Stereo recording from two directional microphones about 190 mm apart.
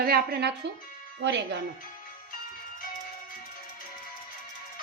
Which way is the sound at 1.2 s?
70° right (ahead or behind).